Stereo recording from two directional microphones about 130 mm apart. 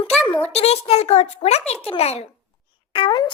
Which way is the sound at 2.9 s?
40° left (ahead or behind).